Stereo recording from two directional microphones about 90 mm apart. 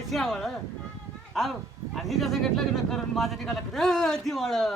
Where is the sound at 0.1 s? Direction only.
5° left (ahead or behind).